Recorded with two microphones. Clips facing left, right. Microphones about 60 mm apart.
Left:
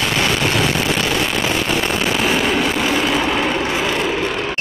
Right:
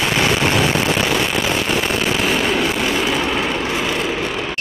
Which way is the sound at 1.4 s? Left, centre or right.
Centre.